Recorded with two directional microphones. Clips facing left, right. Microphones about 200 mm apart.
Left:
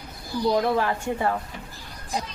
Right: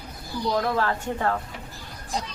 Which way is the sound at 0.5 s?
15° left (ahead or behind).